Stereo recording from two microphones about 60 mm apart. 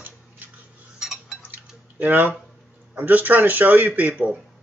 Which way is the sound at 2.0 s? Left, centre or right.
Right.